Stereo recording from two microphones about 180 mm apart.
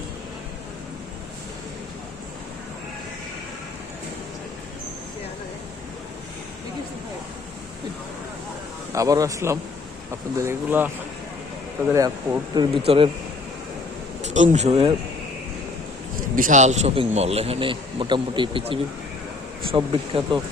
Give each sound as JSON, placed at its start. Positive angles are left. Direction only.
{"t": 8.9, "sound": "speech", "side_deg": -20}
{"t": 12.8, "sound": "a man's voice", "side_deg": -35}
{"t": 14.2, "sound": "speech", "side_deg": -40}
{"t": 16.1, "sound": "a man's voice", "side_deg": -50}